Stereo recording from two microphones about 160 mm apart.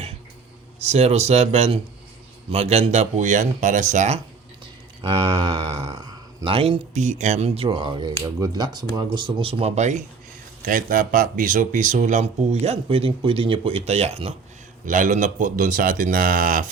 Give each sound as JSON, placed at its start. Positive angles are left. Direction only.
{"t": 0.8, "sound": "speech", "side_deg": -40}
{"t": 5.0, "sound": "speech", "side_deg": -30}
{"t": 10.6, "sound": "speech", "side_deg": -60}
{"t": 14.8, "sound": "speech", "side_deg": -55}